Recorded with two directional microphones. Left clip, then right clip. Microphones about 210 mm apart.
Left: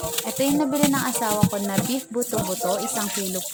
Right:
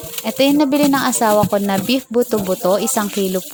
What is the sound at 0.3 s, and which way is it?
Speech, 35° right (ahead or behind).